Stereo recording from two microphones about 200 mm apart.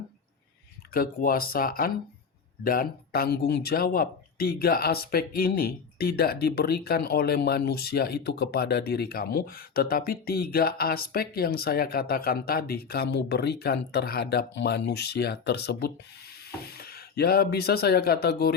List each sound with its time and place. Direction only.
0.9 s speech: 45° left (ahead or behind)